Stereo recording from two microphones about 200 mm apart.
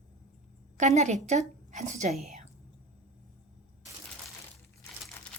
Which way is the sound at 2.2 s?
35° right (ahead or behind).